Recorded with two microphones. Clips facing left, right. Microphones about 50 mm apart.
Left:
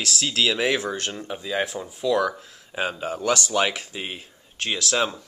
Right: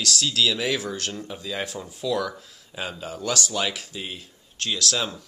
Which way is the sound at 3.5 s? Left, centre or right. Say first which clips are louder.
Left 4 dB; left.